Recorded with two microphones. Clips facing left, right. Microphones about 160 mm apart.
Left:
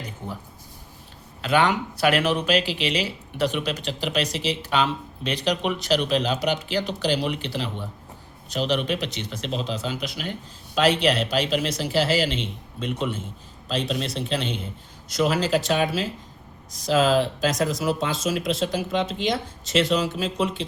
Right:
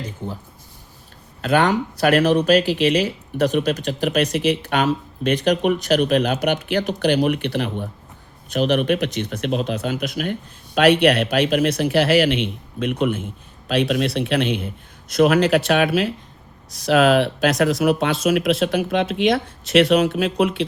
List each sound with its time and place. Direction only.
1.4 s speech: 45° right (ahead or behind)
10.8 s speech: 60° right (ahead or behind)